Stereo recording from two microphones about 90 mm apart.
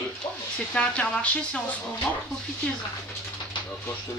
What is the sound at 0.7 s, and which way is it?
Speech, 15° left (ahead or behind).